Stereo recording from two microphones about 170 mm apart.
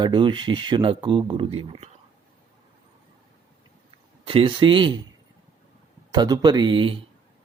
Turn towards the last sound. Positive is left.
turn(degrees=-30)  # may be behind; listen again after turning